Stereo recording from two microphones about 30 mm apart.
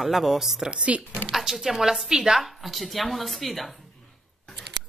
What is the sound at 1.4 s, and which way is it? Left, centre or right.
Speech, centre.